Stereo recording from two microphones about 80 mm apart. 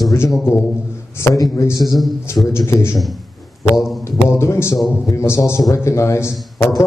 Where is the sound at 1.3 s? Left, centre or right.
Left.